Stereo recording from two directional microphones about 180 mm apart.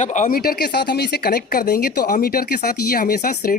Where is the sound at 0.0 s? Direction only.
45° left (ahead or behind).